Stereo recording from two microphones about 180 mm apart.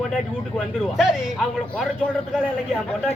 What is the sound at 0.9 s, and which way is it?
Speech, centre (ahead or behind).